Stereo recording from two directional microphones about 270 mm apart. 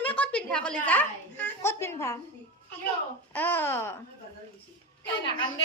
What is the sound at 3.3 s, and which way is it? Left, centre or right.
Speech, centre.